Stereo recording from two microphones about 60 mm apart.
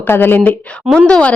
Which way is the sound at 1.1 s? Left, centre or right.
Left.